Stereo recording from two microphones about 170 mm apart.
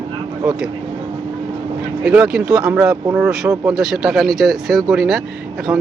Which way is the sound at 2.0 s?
5° right (ahead or behind).